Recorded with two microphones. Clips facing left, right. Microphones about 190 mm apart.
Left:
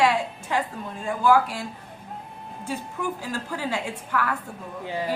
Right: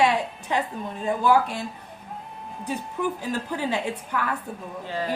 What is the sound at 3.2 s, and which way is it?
A woman's voice, 20° right (ahead or behind).